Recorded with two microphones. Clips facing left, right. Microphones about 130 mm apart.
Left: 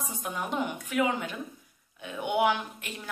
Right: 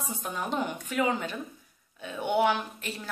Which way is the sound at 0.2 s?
15° left (ahead or behind).